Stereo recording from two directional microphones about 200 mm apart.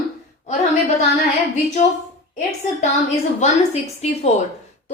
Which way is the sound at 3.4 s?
35° left (ahead or behind).